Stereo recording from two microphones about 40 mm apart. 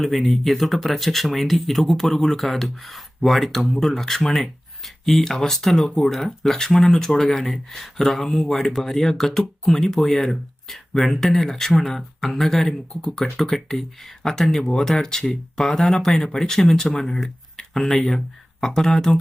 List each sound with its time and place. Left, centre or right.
0.0 s speech: centre